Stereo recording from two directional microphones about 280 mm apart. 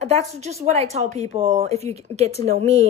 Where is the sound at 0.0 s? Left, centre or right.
Right.